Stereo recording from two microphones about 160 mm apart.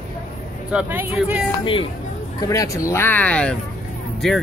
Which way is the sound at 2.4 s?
20° left (ahead or behind).